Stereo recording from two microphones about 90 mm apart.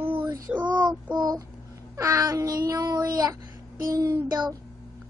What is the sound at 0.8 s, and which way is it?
Speech, 50° right (ahead or behind).